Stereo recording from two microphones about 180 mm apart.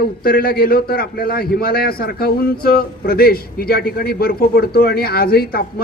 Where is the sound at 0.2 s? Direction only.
55° left (ahead or behind).